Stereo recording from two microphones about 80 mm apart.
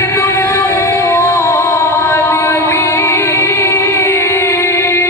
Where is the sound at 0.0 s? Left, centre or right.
Left.